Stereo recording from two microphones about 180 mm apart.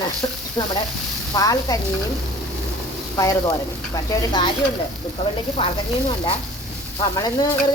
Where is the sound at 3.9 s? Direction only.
25° left (ahead or behind).